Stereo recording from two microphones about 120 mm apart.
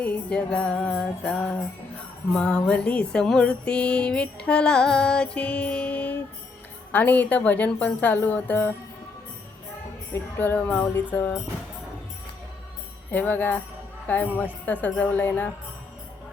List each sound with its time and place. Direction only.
0.0 s music: 10° left (ahead or behind)
10.2 s music: 15° left (ahead or behind)
13.1 s music: 15° left (ahead or behind)